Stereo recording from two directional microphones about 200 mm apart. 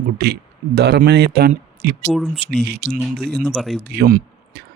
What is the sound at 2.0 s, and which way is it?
Speech, centre (ahead or behind).